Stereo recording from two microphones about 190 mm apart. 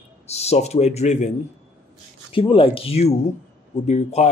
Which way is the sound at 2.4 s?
25° left (ahead or behind).